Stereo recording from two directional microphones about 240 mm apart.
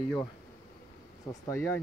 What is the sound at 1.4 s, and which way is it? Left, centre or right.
Speech, centre.